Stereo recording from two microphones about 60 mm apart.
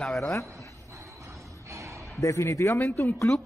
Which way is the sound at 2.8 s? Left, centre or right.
Left.